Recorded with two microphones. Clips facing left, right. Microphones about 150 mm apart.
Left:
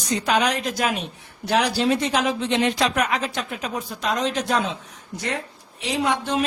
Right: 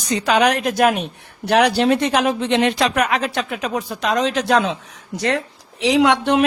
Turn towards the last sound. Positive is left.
turn(degrees=-65)  # may be behind; listen again after turning